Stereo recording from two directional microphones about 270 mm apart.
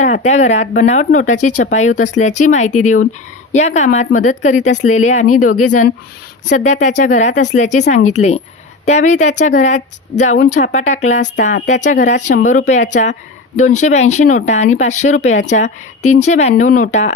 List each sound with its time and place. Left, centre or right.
0.0 s speech: left